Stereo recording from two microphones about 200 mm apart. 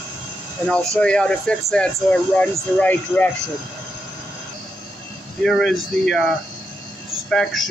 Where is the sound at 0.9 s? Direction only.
5° left (ahead or behind).